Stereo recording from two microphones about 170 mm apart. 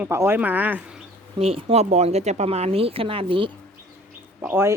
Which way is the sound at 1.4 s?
35° right (ahead or behind).